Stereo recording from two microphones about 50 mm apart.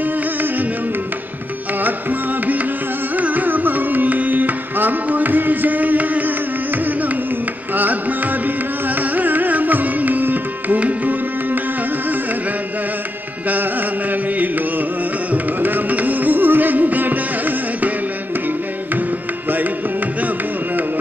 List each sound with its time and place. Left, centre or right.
0.0 s music: right
1.8 s music: right
3.2 s carnatic music: right
7.7 s music: right
8.8 s carnatic music: right
15.3 s music: right